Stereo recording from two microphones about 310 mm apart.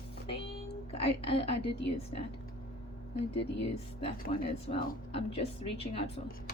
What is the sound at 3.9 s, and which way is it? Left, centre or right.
Speech, centre.